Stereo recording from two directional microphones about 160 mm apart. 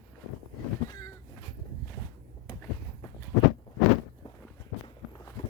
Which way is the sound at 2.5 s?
25° left (ahead or behind).